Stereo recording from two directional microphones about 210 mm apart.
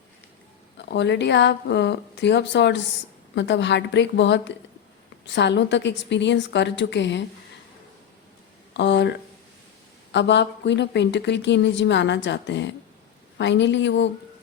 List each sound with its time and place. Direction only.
0.8 s a woman's voice: 55° left (ahead or behind)
8.7 s a woman's voice: 55° left (ahead or behind)